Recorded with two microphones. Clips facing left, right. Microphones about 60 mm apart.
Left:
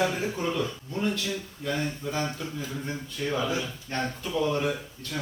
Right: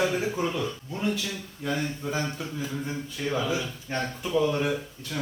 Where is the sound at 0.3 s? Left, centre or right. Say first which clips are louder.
Even; centre.